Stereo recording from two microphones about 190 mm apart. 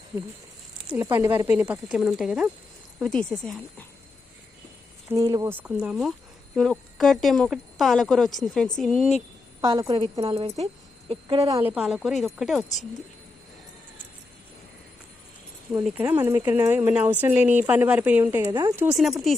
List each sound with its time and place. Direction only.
0.9 s speech: 15° right (ahead or behind); by 3.8 s 5° left (ahead or behind)
5.1 s speech: 15° right (ahead or behind); by 9.1 s centre (ahead or behind)
9.6 s a woman's voice: 15° right (ahead or behind)
10.0 s speech: 30° right (ahead or behind)
11.4 s speech: 15° right (ahead or behind)
11.7 s speech: 5° right (ahead or behind)
15.8 s speech: 5° right (ahead or behind)
18.9 s speech: centre (ahead or behind)